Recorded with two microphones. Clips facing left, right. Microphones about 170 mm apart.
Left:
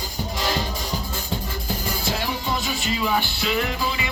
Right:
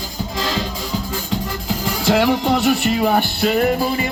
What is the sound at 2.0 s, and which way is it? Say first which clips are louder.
Music: right 13 dB; 80° right.